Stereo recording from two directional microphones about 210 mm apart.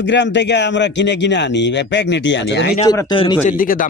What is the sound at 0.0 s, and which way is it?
Speech, 55° left (ahead or behind).